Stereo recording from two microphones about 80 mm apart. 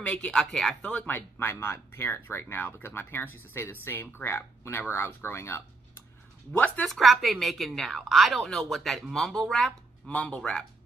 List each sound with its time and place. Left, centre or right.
0.1 s speech: centre
0.8 s speech: centre
6.5 s speech: centre
6.9 s a woman's voice: centre
10.1 s speech: centre